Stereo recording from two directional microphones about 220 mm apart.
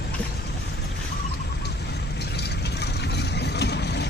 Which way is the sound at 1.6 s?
50° left (ahead or behind).